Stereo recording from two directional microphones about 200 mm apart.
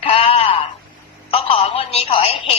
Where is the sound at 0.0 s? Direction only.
30° left (ahead or behind).